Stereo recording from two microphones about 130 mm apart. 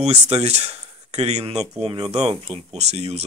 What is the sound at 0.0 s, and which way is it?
Speech, 55° right (ahead or behind).